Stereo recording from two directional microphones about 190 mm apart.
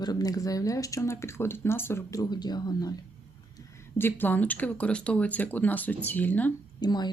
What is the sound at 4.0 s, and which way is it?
Speech, 10° left (ahead or behind).